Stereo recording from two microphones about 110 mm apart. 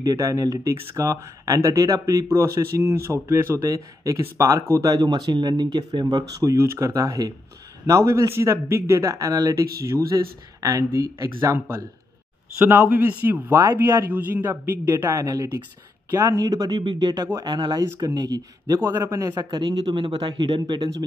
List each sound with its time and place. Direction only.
0.0 s a man's voice: 30° right (ahead or behind)
12.8 s a man's voice: 15° right (ahead or behind); by 18.8 s 35° right (ahead or behind)
18.8 s speech: 20° right (ahead or behind); by 20.9 s 45° right (ahead or behind)